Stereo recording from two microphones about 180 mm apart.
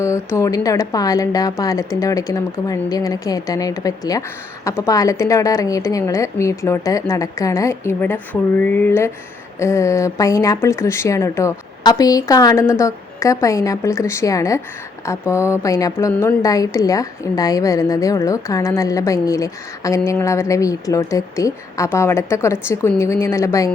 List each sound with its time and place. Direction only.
0.0 s a woman's voice: 15° left (ahead or behind)